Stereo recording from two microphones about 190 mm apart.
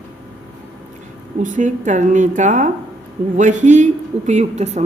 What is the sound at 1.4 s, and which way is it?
A woman's voice, 40° right (ahead or behind).